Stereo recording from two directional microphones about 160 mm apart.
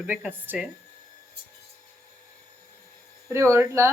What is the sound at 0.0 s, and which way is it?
Speech, 10° right (ahead or behind).